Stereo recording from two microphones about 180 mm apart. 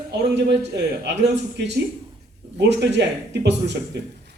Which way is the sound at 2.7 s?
75° right (ahead or behind).